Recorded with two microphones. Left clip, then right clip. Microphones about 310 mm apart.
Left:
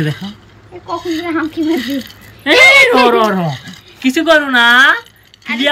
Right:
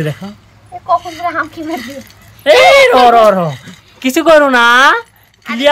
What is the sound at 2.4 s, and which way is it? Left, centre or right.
Speech, centre.